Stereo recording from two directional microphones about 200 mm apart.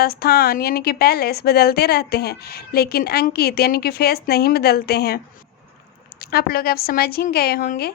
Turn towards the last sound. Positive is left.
turn(degrees=45)  # may be behind; listen again after turning